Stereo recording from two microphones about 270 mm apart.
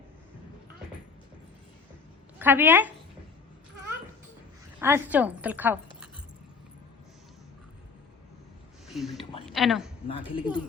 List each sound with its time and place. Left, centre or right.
2.4 s a woman's voice: centre
4.8 s a woman's voice: centre
8.9 s a sound: centre
9.5 s a woman's voice: centre
10.1 s a woman's voice: centre